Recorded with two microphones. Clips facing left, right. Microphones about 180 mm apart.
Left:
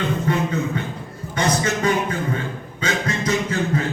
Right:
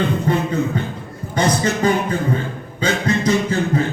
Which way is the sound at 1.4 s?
35° right (ahead or behind).